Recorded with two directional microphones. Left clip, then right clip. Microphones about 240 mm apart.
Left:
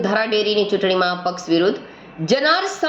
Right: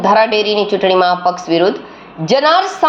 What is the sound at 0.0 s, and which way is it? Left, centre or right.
A woman's voice, centre.